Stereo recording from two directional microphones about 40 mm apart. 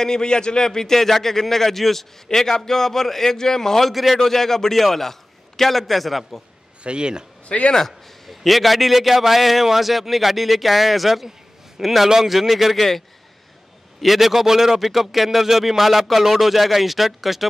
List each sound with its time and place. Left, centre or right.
0.0 s a man's voice: centre
3.9 s a man's voice: centre
4.2 s a man's voice: centre
6.8 s speech: right
7.4 s speech: left
7.7 s a man's voice: centre
14.0 s a man's voice: centre